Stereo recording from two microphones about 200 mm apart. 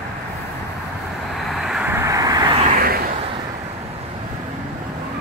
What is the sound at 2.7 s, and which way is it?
Vehicle, 50° right (ahead or behind).